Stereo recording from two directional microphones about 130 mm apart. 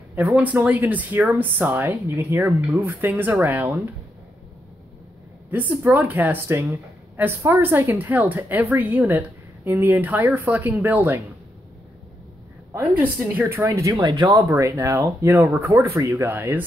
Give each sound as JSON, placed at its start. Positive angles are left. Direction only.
{"t": 0.3, "sound": "speech", "side_deg": -10}
{"t": 5.5, "sound": "speech", "side_deg": -15}
{"t": 12.7, "sound": "speech", "side_deg": -15}
{"t": 13.9, "sound": "speech", "side_deg": -35}
{"t": 14.5, "sound": "speech", "side_deg": -20}